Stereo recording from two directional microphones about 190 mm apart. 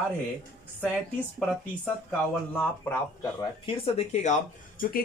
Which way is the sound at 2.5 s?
15° left (ahead or behind).